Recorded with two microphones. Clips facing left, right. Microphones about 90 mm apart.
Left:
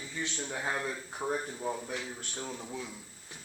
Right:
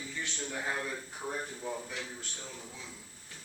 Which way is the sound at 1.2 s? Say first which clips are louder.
Left 6 dB; 35° left (ahead or behind).